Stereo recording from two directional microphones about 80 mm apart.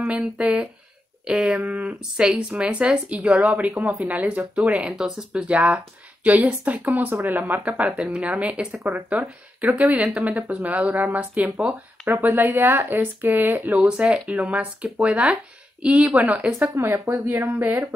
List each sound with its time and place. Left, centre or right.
0.0 s speech: centre
16.6 s speech: right